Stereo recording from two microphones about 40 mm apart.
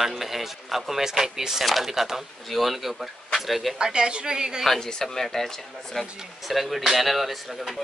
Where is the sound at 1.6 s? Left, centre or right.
Centre.